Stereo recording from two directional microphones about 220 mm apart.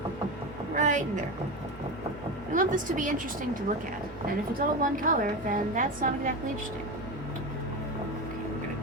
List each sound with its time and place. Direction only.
0.8 s a sound: 35° right (ahead or behind)
2.5 s a woman's voice: 35° right (ahead or behind)
4.8 s a woman's voice: 35° right (ahead or behind)